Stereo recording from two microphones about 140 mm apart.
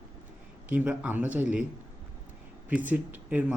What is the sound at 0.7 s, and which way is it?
Speech, 10° right (ahead or behind).